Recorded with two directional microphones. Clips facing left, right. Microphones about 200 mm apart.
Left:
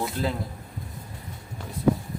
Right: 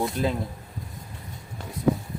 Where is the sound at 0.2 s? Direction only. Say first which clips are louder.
Right 1 dB; 20° right (ahead or behind).